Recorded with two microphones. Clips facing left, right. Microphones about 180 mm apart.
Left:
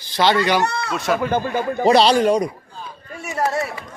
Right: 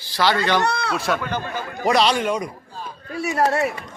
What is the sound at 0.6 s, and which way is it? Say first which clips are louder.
Speech: even; 65° right (ahead or behind).